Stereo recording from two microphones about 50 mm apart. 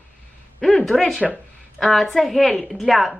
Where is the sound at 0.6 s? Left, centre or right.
Centre.